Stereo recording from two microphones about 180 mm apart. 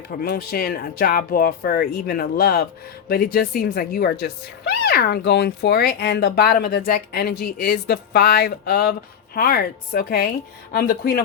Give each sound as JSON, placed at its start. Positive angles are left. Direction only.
{"t": 0.1, "sound": "speech", "side_deg": 55}